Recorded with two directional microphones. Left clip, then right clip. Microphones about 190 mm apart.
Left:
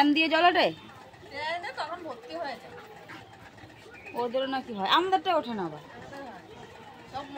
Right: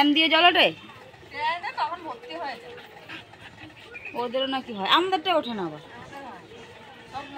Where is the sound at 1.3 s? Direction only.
30° left (ahead or behind).